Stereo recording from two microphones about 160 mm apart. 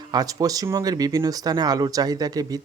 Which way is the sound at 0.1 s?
25° right (ahead or behind).